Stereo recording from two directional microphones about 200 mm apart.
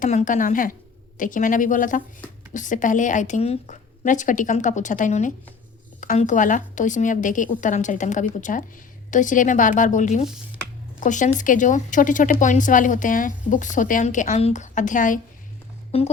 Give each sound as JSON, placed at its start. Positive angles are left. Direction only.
{"t": 0.0, "sound": "speech", "side_deg": 35}